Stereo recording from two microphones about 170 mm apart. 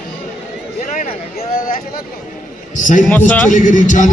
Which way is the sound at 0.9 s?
50° left (ahead or behind).